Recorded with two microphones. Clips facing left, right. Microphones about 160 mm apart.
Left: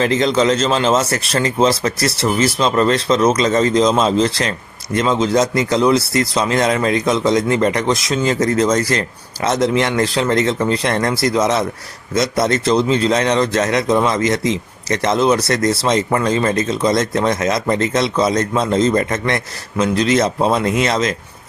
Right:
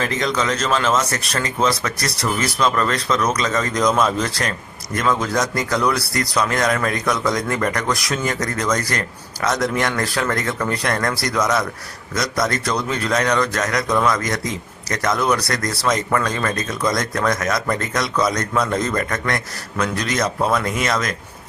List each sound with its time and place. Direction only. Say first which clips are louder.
0.0 s speech: left 7 dB; 30° left (ahead or behind)